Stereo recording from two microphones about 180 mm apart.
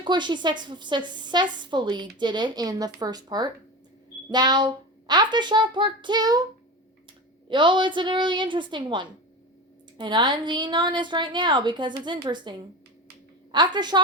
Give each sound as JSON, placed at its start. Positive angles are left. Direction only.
{"t": 0.0, "sound": "a woman's voice", "side_deg": -25}
{"t": 7.5, "sound": "a woman's voice", "side_deg": -25}